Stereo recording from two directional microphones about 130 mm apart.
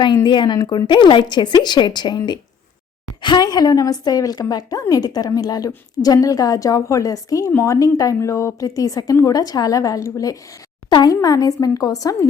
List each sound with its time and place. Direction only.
0.0 s a woman's voice: 35° left (ahead or behind)